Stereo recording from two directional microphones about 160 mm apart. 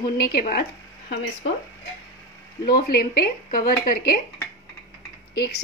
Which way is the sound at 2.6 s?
70° left (ahead or behind).